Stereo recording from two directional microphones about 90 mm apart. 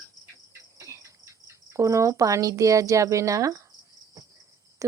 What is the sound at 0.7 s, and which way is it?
Speech, 35° right (ahead or behind).